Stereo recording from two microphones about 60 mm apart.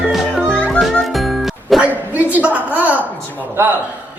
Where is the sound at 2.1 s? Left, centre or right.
Right.